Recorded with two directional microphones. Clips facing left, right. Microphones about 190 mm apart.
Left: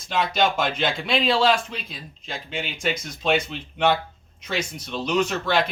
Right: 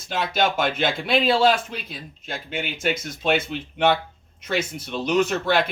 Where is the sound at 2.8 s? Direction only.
55° right (ahead or behind).